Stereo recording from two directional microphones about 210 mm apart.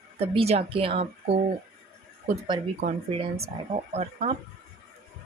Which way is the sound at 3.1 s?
25° right (ahead or behind).